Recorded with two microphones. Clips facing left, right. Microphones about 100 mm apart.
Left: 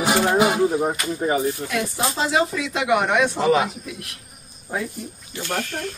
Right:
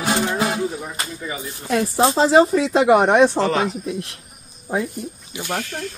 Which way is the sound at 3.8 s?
30° right (ahead or behind).